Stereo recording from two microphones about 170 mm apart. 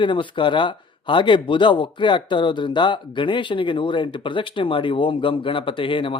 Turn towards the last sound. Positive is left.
turn(degrees=30)  # may be behind; listen again after turning